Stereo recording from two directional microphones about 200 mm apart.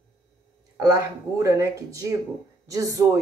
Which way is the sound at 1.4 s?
15° right (ahead or behind).